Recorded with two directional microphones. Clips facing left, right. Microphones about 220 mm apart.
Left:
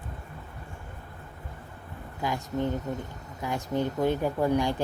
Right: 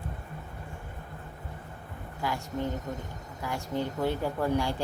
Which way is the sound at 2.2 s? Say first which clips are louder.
Left 3 dB; 20° left (ahead or behind).